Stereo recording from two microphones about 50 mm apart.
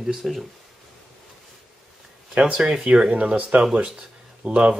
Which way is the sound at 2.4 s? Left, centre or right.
Centre.